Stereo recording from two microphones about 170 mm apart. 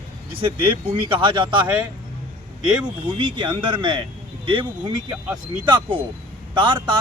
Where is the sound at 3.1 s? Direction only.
30° right (ahead or behind).